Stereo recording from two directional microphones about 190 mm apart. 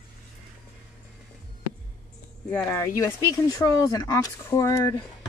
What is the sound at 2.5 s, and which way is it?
Speech, 15° left (ahead or behind).